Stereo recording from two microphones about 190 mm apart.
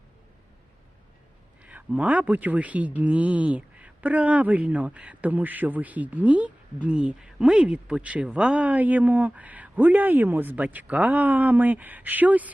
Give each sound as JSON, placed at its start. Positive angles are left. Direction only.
{"t": 1.6, "sound": "speech", "side_deg": -5}